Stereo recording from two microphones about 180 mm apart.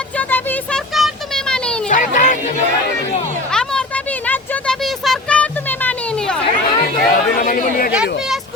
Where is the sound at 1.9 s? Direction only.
45° left (ahead or behind).